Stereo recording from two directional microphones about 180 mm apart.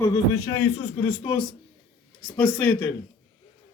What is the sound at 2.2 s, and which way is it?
Speech, 5° left (ahead or behind).